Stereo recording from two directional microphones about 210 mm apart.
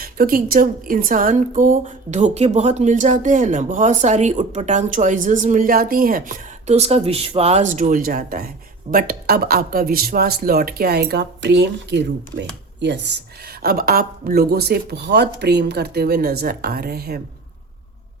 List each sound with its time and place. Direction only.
0.0 s speech: 45° right (ahead or behind)